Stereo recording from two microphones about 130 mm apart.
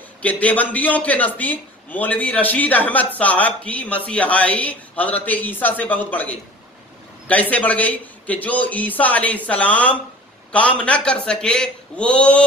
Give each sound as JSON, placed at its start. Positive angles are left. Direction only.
{"t": 0.2, "sound": "a man's voice", "side_deg": 10}